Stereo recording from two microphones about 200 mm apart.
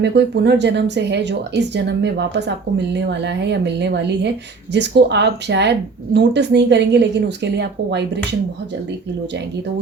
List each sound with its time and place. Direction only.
0.0 s speech: 60° right (ahead or behind)